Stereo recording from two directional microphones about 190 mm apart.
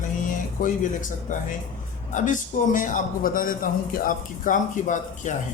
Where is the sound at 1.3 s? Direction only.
45° left (ahead or behind).